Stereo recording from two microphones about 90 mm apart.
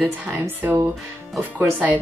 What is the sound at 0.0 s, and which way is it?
Speech, 20° right (ahead or behind).